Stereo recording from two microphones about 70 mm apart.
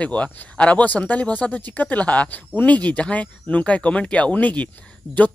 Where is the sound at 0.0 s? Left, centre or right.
Centre.